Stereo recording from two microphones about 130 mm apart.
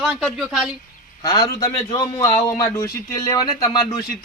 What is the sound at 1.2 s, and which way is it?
Speech, 25° left (ahead or behind).